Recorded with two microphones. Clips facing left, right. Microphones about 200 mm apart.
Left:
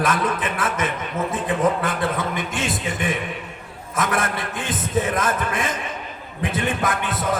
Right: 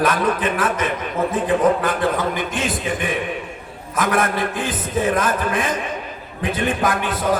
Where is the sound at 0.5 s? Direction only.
30° left (ahead or behind).